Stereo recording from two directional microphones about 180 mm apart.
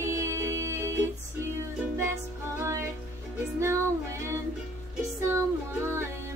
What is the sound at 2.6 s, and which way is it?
Music, 15° right (ahead or behind).